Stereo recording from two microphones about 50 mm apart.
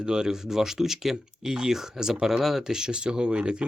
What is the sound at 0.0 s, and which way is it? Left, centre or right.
Speech, centre.